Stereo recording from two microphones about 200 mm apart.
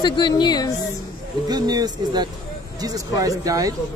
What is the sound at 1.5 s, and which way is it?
A man's voice, 20° right (ahead or behind).